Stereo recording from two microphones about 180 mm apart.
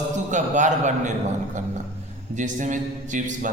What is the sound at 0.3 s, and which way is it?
Speech, 40° right (ahead or behind).